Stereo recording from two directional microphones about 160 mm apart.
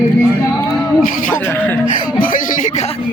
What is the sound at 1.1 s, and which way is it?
Speech, 55° left (ahead or behind).